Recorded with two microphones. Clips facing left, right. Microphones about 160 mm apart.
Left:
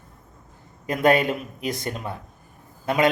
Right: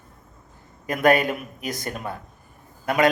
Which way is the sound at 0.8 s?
25° left (ahead or behind).